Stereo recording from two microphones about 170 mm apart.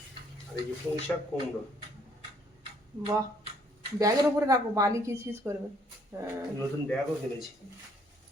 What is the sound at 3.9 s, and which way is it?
A woman's voice, 20° right (ahead or behind).